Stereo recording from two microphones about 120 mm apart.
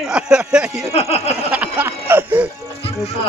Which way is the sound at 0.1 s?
5° right (ahead or behind).